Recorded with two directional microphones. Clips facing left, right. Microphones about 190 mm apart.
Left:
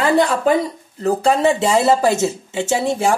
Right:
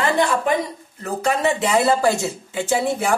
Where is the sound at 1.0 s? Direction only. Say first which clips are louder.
Left 6 dB; 30° left (ahead or behind).